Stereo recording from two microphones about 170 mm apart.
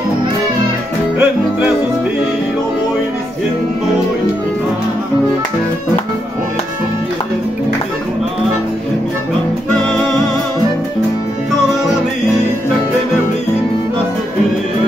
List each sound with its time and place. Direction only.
1.1 s music: 10° right (ahead or behind)